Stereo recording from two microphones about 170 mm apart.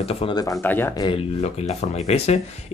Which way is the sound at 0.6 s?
10° left (ahead or behind).